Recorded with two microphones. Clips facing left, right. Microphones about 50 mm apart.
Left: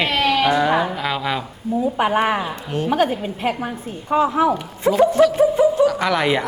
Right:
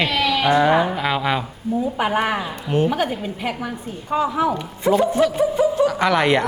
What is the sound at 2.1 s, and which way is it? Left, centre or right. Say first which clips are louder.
Speech: left 1 dB; centre.